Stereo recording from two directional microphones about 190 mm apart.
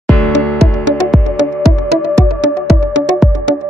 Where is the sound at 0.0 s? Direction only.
5° left (ahead or behind).